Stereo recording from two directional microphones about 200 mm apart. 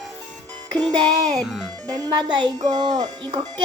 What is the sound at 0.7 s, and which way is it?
Music, 20° right (ahead or behind).